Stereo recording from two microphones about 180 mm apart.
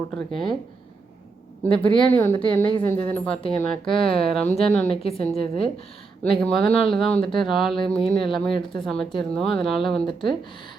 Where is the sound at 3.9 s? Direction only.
30° left (ahead or behind).